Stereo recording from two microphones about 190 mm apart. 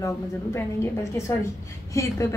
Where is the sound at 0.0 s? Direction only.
15° left (ahead or behind).